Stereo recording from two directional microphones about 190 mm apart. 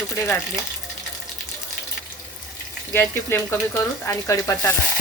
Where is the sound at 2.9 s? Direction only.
15° left (ahead or behind).